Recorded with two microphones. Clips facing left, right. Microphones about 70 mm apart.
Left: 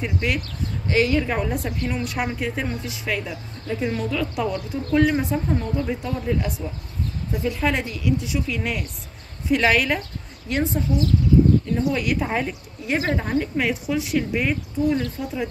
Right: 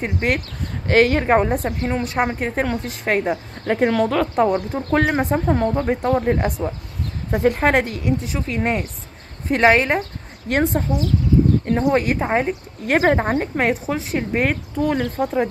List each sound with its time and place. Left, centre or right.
0.0 s speech: right
1.7 s speech: right
2.6 s speech: right
3.6 s speech: right
10.5 s speech: right
12.8 s speech: right
14.4 s speech: right